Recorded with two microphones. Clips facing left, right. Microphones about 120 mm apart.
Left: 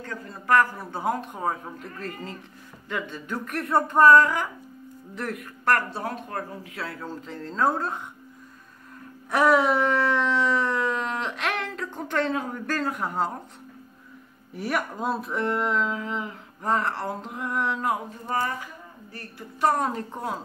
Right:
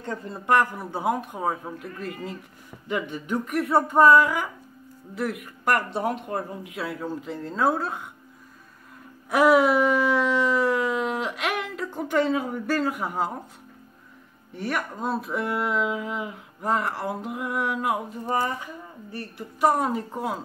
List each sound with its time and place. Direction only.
0.0 s speech: 25° right (ahead or behind); by 8.0 s 5° right (ahead or behind)
9.3 s a sound: 10° right (ahead or behind)
14.5 s a woman's voice: centre (ahead or behind); by 19.7 s 20° right (ahead or behind)
19.7 s speech: 5° right (ahead or behind)